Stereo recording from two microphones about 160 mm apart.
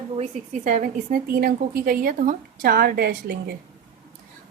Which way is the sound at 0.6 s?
55° right (ahead or behind).